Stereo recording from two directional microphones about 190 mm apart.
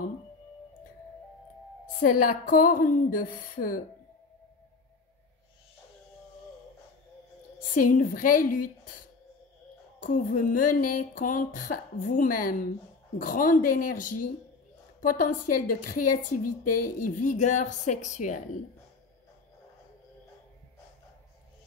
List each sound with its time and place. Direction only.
2.0 s speech: 45° left (ahead or behind)
7.7 s speech: 45° left (ahead or behind)
9.9 s speech: 45° left (ahead or behind)